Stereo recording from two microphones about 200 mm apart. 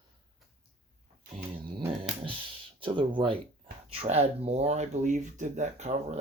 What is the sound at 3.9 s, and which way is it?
Speech, 30° right (ahead or behind).